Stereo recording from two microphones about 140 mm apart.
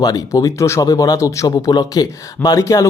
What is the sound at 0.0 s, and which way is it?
Speech, 25° left (ahead or behind).